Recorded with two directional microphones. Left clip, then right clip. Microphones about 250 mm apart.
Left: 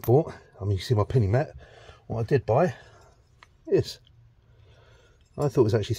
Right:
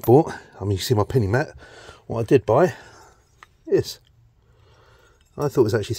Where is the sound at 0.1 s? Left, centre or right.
Right.